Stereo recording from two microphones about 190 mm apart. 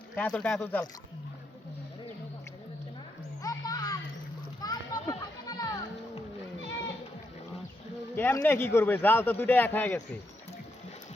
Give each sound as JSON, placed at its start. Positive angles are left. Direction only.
{"t": 0.2, "sound": "speech", "side_deg": 5}
{"t": 3.4, "sound": "a sound", "side_deg": 20}
{"t": 4.6, "sound": "children playing", "side_deg": 20}
{"t": 8.1, "sound": "speech", "side_deg": 10}